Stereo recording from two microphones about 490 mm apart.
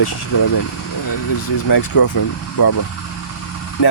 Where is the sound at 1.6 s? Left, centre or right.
Left.